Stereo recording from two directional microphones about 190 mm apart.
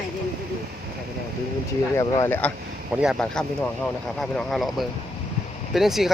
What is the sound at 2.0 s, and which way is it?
Speech, 15° left (ahead or behind).